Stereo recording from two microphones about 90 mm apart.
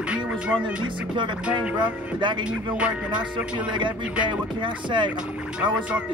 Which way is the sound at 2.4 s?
15° right (ahead or behind).